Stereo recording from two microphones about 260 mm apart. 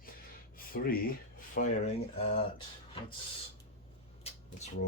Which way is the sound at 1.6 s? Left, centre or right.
Left.